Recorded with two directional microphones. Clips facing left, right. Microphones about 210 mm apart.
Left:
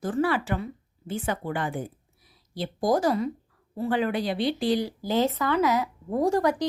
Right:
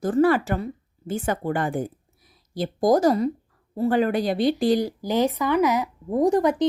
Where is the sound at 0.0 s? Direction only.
45° right (ahead or behind).